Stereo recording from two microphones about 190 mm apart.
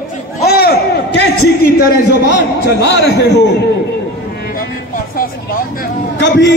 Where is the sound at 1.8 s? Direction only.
65° left (ahead or behind).